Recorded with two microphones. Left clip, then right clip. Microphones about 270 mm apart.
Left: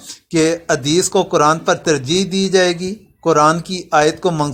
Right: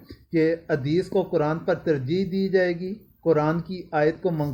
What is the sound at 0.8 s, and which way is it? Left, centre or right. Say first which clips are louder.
Speech: left 9 dB; left.